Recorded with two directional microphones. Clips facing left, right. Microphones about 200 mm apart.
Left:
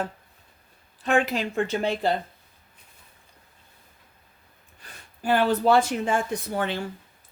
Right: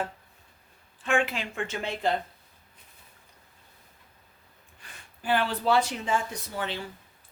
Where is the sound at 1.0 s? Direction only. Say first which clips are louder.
Left 4 dB; 40° left (ahead or behind).